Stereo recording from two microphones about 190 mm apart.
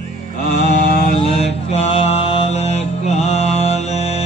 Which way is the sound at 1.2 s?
30° left (ahead or behind).